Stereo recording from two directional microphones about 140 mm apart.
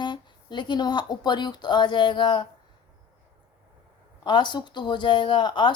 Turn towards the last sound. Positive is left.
turn(degrees=35)  # may be behind; listen again after turning